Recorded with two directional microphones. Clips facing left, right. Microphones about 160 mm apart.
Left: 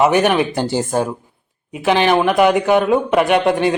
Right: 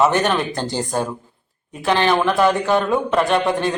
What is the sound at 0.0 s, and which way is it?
Speech, 15° left (ahead or behind).